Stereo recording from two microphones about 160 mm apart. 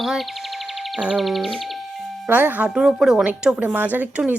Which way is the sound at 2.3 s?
10° right (ahead or behind).